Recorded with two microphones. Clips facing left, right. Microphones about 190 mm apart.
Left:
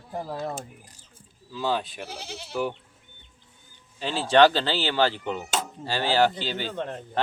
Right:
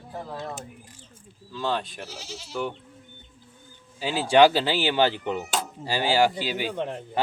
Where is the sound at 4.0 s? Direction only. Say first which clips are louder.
Right 1 dB; 10° right (ahead or behind).